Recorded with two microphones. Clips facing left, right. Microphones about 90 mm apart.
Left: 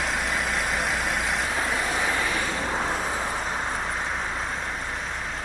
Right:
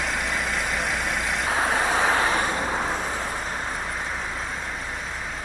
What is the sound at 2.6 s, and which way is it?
Vehicle, centre (ahead or behind).